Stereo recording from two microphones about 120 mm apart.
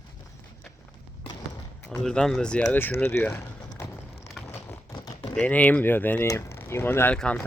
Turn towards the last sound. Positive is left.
turn(degrees=10)  # may be behind; listen again after turning